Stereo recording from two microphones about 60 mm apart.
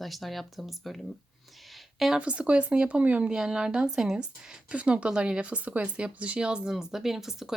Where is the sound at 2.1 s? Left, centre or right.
Centre.